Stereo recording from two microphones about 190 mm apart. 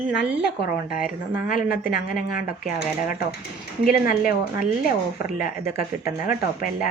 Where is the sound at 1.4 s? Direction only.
50° left (ahead or behind).